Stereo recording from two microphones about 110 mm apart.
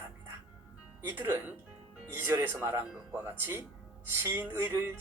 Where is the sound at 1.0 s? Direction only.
20° right (ahead or behind).